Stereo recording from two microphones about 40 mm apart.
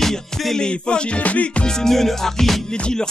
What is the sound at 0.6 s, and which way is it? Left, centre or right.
Music, left.